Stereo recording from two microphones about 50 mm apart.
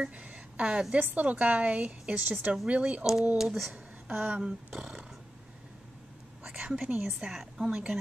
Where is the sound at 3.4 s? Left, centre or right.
Centre.